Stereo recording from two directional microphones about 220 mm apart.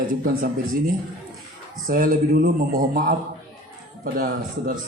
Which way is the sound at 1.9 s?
40° right (ahead or behind).